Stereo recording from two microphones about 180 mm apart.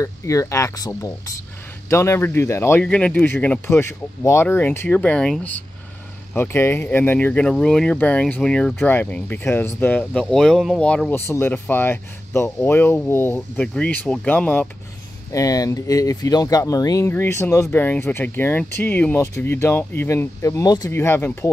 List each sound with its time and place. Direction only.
0.0 s speech: 15° left (ahead or behind)
15.3 s speech: 20° left (ahead or behind)